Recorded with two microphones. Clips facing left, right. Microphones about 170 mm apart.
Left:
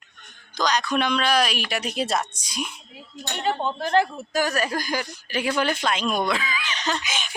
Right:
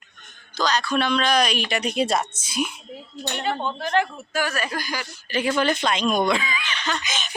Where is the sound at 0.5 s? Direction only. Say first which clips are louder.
Right 1 dB; 15° left (ahead or behind); by 2.7 s 5° right (ahead or behind).